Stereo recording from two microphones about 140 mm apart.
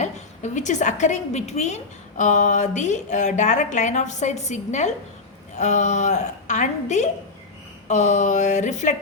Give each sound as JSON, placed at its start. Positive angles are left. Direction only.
{"t": 0.0, "sound": "a woman's voice", "side_deg": 60}